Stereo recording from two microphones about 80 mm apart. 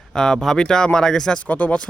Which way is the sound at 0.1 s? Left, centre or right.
Centre.